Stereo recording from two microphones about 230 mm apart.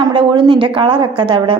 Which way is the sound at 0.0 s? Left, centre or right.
Right.